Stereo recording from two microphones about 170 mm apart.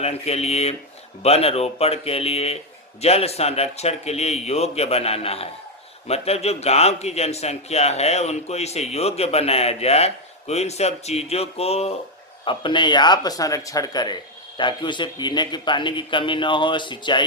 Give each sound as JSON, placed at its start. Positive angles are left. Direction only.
{"t": 0.0, "sound": "a man's voice", "side_deg": 40}